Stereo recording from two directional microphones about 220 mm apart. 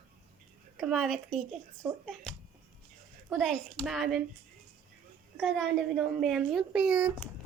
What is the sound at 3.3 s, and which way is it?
Speech, centre (ahead or behind).